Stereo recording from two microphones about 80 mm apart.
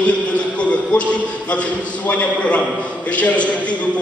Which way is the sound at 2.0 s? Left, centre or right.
Centre.